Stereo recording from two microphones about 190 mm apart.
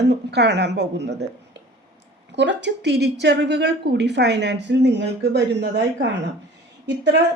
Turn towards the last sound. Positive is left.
turn(degrees=-65)  # may be behind; listen again after turning